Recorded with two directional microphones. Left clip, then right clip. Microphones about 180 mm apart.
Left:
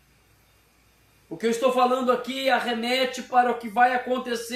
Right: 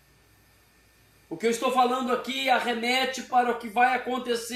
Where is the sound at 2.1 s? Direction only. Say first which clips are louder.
Left 2 dB; 20° left (ahead or behind).